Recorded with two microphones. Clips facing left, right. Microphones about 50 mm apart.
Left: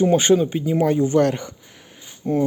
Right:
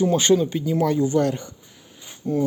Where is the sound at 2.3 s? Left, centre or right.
Left.